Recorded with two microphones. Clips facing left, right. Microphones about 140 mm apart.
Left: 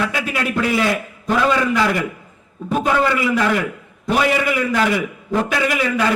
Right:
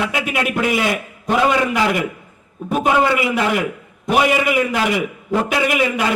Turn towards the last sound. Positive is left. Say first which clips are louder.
# right 1 dB
turn(degrees=-20)  # may be behind; listen again after turning